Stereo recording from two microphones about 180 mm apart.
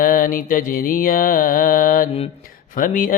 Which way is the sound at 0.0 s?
50° left (ahead or behind).